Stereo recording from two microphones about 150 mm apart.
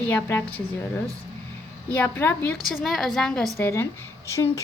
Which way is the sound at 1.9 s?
15° left (ahead or behind).